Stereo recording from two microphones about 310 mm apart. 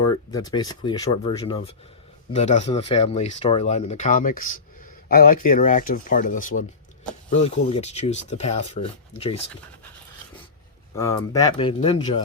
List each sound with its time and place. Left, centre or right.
0.0 s speech: centre
10.9 s speech: centre